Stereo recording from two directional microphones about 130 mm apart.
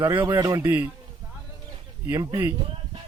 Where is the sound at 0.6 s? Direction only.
15° right (ahead or behind).